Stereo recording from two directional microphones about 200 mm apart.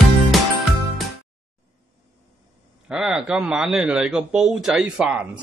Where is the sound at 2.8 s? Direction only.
5° right (ahead or behind).